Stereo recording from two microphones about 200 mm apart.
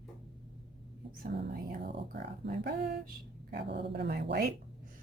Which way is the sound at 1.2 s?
55° right (ahead or behind).